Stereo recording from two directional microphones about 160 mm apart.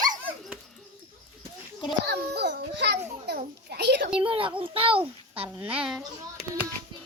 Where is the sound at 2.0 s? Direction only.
90° right.